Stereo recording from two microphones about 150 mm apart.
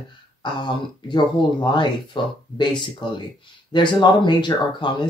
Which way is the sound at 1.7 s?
30° left (ahead or behind).